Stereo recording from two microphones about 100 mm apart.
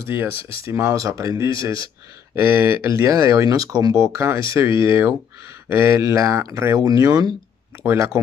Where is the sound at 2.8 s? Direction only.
30° right (ahead or behind).